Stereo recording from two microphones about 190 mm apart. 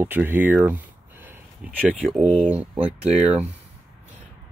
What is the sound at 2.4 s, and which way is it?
Speech, 5° right (ahead or behind).